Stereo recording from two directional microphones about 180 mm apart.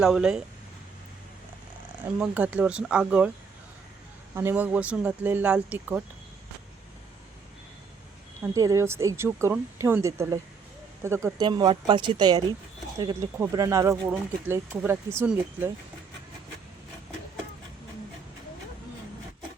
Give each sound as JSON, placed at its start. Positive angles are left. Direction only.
{"t": 0.0, "sound": "speech", "side_deg": -5}
{"t": 2.1, "sound": "speech", "side_deg": -10}
{"t": 4.4, "sound": "speech", "side_deg": -10}
{"t": 8.5, "sound": "speech", "side_deg": -20}